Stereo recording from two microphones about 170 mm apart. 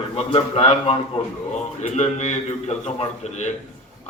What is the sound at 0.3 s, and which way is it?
A man's voice, 35° left (ahead or behind).